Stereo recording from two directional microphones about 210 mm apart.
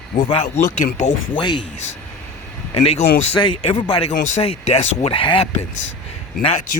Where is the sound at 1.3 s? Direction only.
20° left (ahead or behind).